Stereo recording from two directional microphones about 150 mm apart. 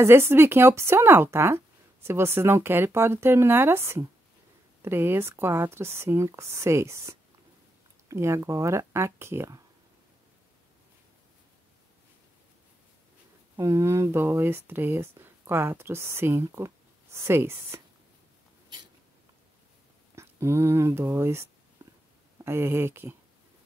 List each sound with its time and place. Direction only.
0.0 s speech: 15° right (ahead or behind)
13.6 s speech: 20° right (ahead or behind)
20.2 s speech: 15° right (ahead or behind)